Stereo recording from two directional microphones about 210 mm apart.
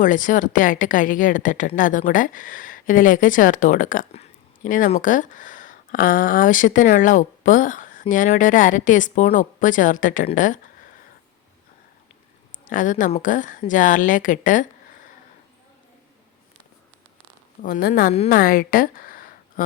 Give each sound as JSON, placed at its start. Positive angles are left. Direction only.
{"t": 0.0, "sound": "speech", "side_deg": 40}
{"t": 12.6, "sound": "speech", "side_deg": 40}
{"t": 17.6, "sound": "speech", "side_deg": 45}